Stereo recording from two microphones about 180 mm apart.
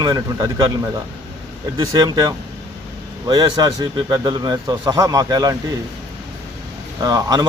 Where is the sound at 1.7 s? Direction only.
20° right (ahead or behind).